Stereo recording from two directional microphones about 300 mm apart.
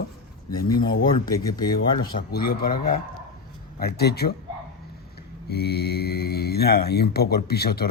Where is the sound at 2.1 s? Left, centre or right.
Left.